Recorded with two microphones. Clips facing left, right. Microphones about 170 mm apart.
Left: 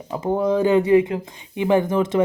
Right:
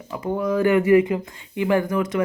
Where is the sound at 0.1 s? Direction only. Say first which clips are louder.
Left 3 dB; 30° left (ahead or behind).